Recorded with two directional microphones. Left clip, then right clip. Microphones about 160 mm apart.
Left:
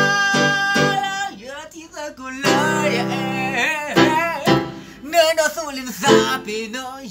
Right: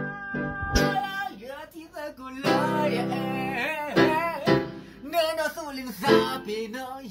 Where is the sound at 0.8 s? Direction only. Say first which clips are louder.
Left 7 dB; centre (ahead or behind).